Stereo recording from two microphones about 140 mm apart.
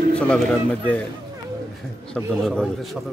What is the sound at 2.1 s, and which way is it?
Speech, 5° left (ahead or behind).